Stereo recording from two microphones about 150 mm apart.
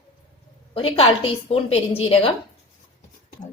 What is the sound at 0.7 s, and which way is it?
A woman's voice, 35° left (ahead or behind).